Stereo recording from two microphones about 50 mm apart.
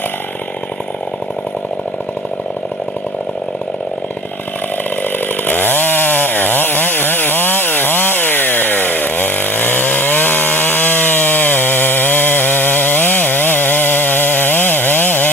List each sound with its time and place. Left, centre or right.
5.5 s chainsaw: left